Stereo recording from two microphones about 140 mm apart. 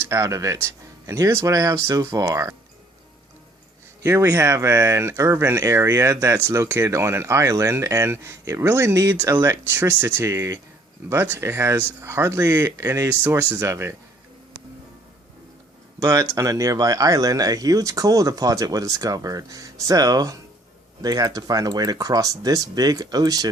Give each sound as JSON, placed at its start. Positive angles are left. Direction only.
{"t": 0.0, "sound": "speech", "side_deg": -20}
{"t": 4.0, "sound": "speech", "side_deg": -20}
{"t": 16.0, "sound": "speech", "side_deg": -20}